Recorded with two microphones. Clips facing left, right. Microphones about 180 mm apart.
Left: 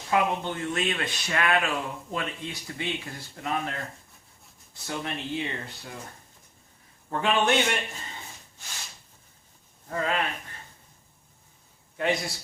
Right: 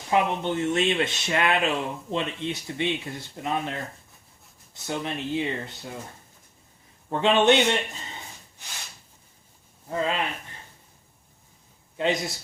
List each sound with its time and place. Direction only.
0.1 s speech: 25° right (ahead or behind)
7.1 s speech: 25° right (ahead or behind)
9.9 s speech: 20° right (ahead or behind)
11.9 s speech: 20° right (ahead or behind)